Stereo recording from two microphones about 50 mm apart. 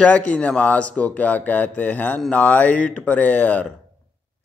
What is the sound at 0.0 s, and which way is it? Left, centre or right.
A man's voice, left.